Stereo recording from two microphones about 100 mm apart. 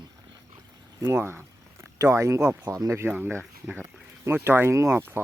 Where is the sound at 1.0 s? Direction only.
25° right (ahead or behind).